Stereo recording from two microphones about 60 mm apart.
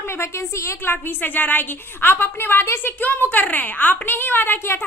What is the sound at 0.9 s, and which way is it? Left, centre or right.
A woman's voice, left.